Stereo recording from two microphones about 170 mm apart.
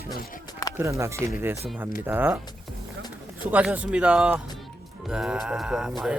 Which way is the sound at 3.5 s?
10° right (ahead or behind).